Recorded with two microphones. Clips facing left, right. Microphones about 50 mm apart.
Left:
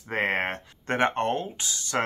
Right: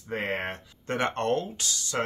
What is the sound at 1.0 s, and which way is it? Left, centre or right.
Speech, left.